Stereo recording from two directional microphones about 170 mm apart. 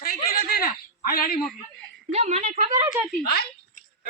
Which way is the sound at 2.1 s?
40° right (ahead or behind).